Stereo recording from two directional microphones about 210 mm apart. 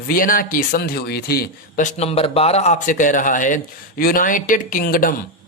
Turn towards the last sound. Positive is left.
turn(degrees=40)  # may be behind; listen again after turning